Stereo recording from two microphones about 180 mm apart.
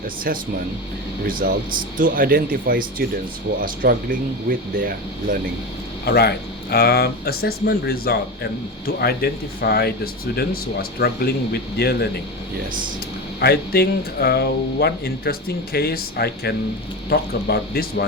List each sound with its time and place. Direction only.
0.3 s speech: 60° right (ahead or behind)
6.1 s speech: 60° left (ahead or behind)
13.4 s speech: 60° left (ahead or behind)